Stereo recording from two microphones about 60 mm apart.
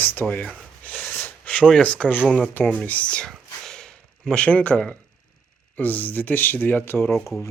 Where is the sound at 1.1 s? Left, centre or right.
Left.